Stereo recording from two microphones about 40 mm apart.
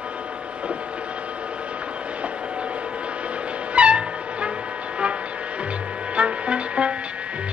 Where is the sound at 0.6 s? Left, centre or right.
Right.